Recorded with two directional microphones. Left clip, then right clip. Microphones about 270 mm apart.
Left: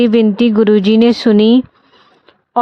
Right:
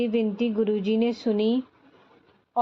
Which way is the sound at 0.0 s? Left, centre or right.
Left.